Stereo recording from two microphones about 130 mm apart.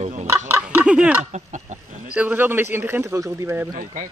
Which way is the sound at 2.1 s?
10° right (ahead or behind).